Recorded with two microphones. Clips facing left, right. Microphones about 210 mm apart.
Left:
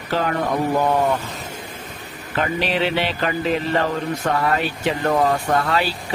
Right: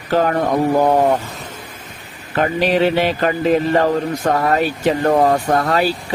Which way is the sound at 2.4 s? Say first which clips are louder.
Right 6 dB; 45° right (ahead or behind).